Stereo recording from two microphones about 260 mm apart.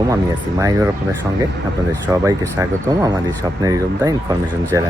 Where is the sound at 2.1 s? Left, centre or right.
Centre.